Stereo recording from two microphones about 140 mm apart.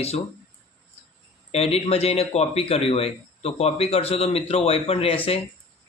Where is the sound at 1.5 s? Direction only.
45° left (ahead or behind).